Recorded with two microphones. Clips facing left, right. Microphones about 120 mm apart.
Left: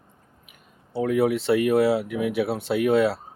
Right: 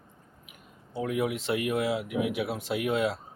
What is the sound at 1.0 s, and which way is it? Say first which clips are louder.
Speech: left 8 dB; 35° left (ahead or behind).